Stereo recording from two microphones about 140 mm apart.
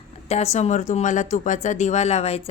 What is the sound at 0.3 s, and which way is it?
Speech, 50° left (ahead or behind).